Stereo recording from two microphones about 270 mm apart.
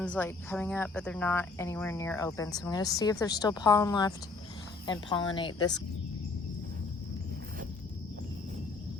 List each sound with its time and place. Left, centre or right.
0.0 s speech: centre